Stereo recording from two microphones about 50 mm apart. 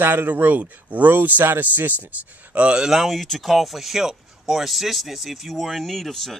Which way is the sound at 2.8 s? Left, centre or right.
Centre.